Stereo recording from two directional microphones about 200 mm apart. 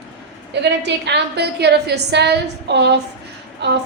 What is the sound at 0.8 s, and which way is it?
A woman's voice, 55° right (ahead or behind).